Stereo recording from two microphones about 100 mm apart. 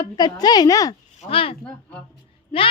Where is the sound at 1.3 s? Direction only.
65° left (ahead or behind).